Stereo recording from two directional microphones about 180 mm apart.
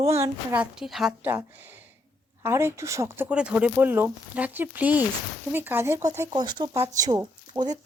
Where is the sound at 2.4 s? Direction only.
15° right (ahead or behind).